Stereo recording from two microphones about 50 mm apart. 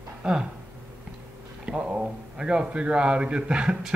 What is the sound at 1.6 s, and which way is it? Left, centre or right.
A man's voice, right.